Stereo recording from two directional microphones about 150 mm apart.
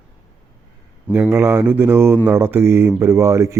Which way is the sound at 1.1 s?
15° right (ahead or behind).